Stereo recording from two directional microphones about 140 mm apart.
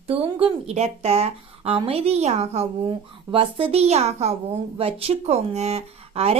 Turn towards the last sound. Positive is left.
turn(degrees=-45)  # may be behind; listen again after turning